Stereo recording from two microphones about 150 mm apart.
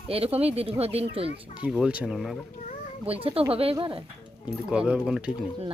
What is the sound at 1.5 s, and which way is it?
Speech, 5° right (ahead or behind).